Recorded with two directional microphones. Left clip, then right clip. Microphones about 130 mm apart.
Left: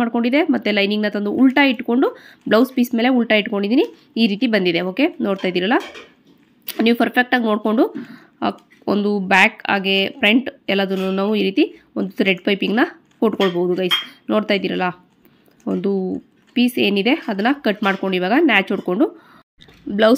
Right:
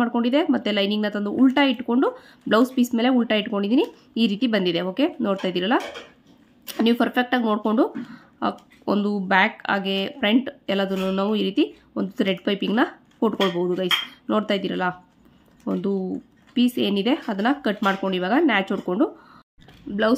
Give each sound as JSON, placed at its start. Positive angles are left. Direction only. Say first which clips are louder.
{"t": 0.0, "sound": "speech", "louder": "left 3 dB", "side_deg": 15}
{"t": 19.9, "sound": "speech", "louder": "left 7 dB", "side_deg": 30}